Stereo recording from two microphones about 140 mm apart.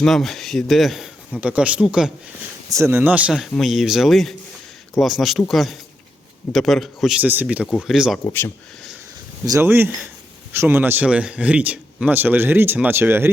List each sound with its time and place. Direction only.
0.0 s speech: centre (ahead or behind)
2.6 s speech: 20° right (ahead or behind); by 8.2 s 5° right (ahead or behind)
8.2 s speech: 15° left (ahead or behind)
9.5 s speech: 15° right (ahead or behind)